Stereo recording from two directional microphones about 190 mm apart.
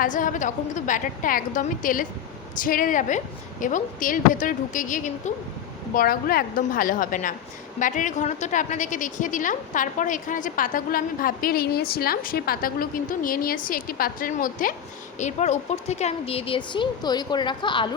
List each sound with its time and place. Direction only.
0.0 s a woman's voice: 45° left (ahead or behind); by 17.9 s 25° left (ahead or behind)